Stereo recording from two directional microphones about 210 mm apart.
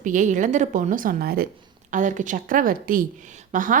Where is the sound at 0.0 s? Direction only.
35° right (ahead or behind).